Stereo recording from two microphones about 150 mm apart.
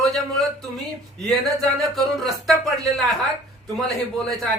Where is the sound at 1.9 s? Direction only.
Centre (ahead or behind).